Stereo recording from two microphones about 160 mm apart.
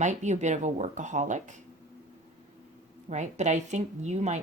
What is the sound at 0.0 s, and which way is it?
Speech, 50° right (ahead or behind).